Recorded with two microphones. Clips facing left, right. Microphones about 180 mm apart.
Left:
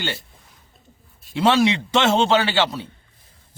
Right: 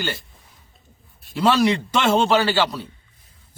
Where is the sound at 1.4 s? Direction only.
25° left (ahead or behind).